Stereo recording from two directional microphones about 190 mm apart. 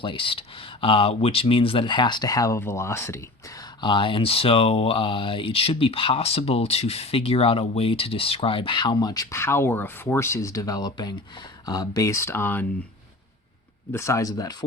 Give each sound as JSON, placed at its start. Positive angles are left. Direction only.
{"t": 0.0, "sound": "speech", "side_deg": 25}
{"t": 3.8, "sound": "speech", "side_deg": 25}
{"t": 13.9, "sound": "speech", "side_deg": 15}